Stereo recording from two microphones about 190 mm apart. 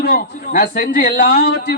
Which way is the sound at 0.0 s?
50° left (ahead or behind).